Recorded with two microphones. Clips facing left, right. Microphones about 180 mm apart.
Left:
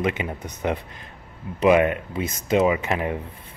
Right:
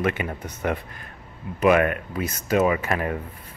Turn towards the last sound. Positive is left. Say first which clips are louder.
# left 1 dB
turn(degrees=20)  # may be behind; listen again after turning